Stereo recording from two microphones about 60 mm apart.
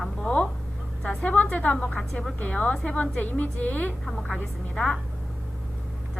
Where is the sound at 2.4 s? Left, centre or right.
Centre.